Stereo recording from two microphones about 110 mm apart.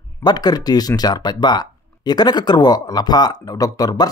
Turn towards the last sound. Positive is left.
turn(degrees=35)  # may be behind; listen again after turning